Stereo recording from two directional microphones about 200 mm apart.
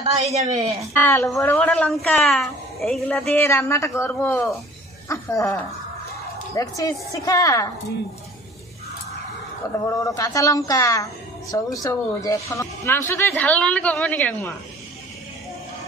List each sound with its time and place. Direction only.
0.0 s speech: 30° right (ahead or behind)
0.9 s a woman's voice: 15° left (ahead or behind)
9.8 s a woman's voice: 15° left (ahead or behind)